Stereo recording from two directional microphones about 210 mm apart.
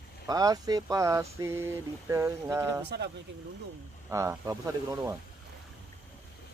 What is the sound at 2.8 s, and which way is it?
Speech, 55° right (ahead or behind).